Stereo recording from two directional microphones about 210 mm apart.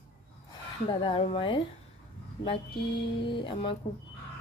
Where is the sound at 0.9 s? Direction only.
25° left (ahead or behind).